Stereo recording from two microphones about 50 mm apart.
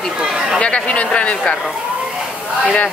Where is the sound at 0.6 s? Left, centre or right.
Left.